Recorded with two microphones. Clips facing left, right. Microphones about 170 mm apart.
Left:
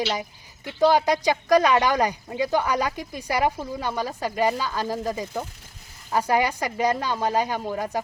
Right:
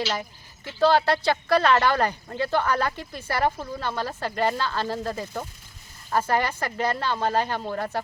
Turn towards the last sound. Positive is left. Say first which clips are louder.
# left 1 dB
turn(degrees=10)  # may be behind; listen again after turning